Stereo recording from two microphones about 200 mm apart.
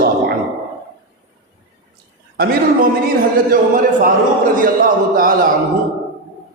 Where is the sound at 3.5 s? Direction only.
45° right (ahead or behind).